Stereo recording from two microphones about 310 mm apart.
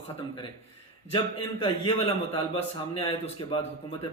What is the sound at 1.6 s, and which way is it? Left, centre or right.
Speech, centre.